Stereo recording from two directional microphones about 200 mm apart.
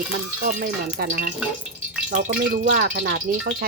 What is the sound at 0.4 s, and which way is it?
Speech, 45° right (ahead or behind).